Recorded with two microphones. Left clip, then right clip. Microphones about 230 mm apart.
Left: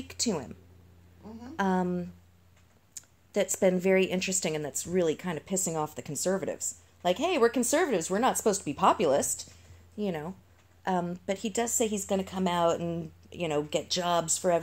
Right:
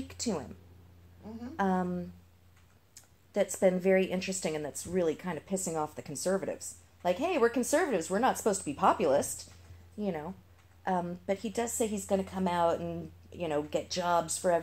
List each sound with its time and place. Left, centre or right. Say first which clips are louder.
0.1 s speech: left 5 dB; left
1.6 s a woman's voice: left 2 dB; left